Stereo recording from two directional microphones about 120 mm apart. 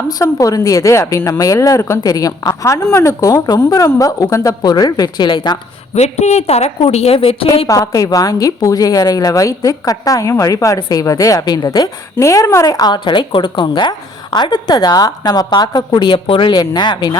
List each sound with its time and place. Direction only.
0.2 s a woman's voice: 30° left (ahead or behind)
5.9 s a woman's voice: 65° left (ahead or behind); by 7.7 s 50° left (ahead or behind)
7.7 s a woman's voice: 30° left (ahead or behind)
12.8 s a woman's voice: 40° left (ahead or behind)